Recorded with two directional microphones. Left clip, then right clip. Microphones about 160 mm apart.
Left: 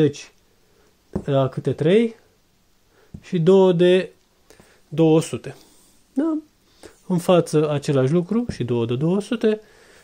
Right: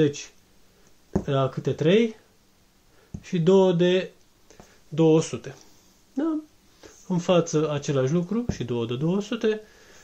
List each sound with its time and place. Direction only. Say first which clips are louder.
0.0 s speech: left 3 dB; 60° left (ahead or behind)
3.2 s speech: left 4 dB; 60° left (ahead or behind)
6.8 s speech: left 4 dB; 65° left (ahead or behind)